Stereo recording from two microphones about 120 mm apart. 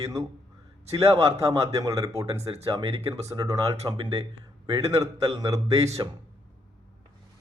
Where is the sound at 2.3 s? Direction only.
60° right (ahead or behind).